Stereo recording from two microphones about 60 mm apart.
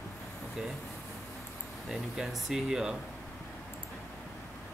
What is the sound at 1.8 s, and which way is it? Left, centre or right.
Speech, centre.